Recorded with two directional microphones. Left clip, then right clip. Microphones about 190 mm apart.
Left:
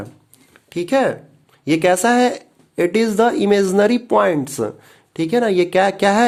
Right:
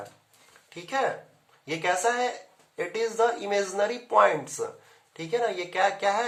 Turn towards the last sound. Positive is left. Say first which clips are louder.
# left 10 dB
turn(degrees=65)  # may be behind; listen again after turning